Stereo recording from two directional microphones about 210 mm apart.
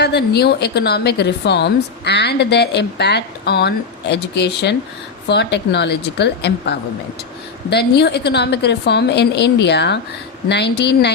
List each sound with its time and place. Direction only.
0.0 s a woman's voice: 50° left (ahead or behind)